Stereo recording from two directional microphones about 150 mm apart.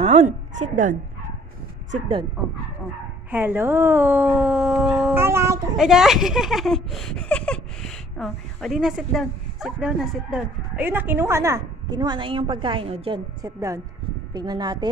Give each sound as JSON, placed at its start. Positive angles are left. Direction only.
{"t": 0.0, "sound": "a woman's voice", "side_deg": -55}
{"t": 3.3, "sound": "speech", "side_deg": -15}
{"t": 5.1, "sound": "speech", "side_deg": -15}
{"t": 5.8, "sound": "speech", "side_deg": -5}
{"t": 13.4, "sound": "speech", "side_deg": -20}